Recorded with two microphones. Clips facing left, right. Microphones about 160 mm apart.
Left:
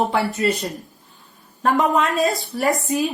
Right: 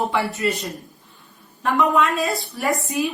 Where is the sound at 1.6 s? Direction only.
40° left (ahead or behind).